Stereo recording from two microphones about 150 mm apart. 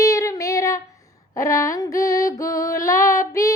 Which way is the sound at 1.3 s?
20° left (ahead or behind).